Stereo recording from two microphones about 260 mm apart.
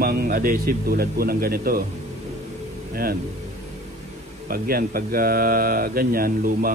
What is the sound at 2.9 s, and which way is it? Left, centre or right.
Speech, right.